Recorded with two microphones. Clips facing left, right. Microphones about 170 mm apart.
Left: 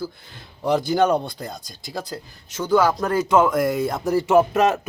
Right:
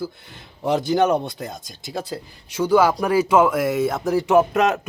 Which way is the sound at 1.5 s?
20° right (ahead or behind).